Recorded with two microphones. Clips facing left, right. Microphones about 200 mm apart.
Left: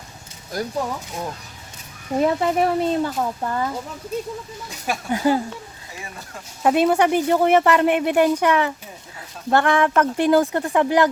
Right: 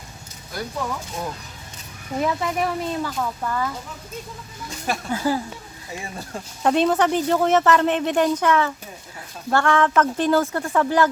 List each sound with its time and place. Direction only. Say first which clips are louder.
0.5 s speech: left 4 dB; 40° left (ahead or behind)
2.1 s speech: left 5 dB; 35° left (ahead or behind)
4.9 s speech: left 3 dB; 20° left (ahead or behind)
6.0 s speech: right 3 dB; 30° right (ahead or behind)
6.6 s speech: left 2 dB; 10° left (ahead or behind)